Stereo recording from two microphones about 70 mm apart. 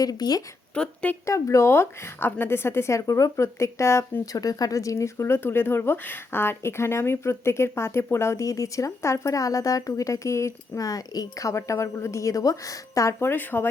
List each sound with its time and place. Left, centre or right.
0.0 s speech: left
0.7 s speech: centre
1.2 s speech: left
4.3 s speech: left
10.8 s speech: left
13.1 s speech: left